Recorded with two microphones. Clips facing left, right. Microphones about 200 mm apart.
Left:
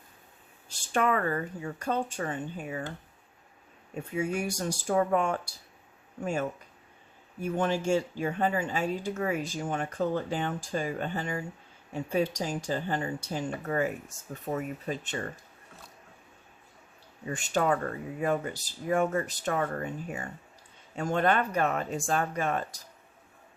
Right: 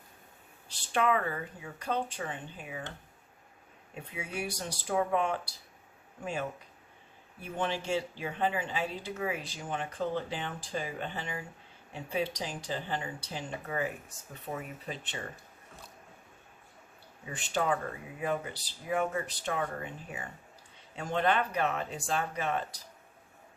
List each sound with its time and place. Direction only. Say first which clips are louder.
0.7 s speech: left 1 dB; 45° left (ahead or behind)
3.9 s speech: left 8 dB; 45° left (ahead or behind)
7.4 s speech: left 6 dB; 45° left (ahead or behind)
17.3 s speech: left 4 dB; 45° left (ahead or behind)